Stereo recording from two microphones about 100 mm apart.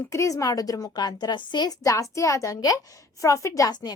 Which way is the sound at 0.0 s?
30° left (ahead or behind).